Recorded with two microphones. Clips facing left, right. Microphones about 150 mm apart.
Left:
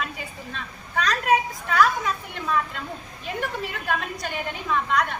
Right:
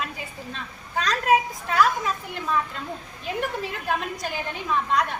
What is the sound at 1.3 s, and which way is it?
Speech, 25° right (ahead or behind).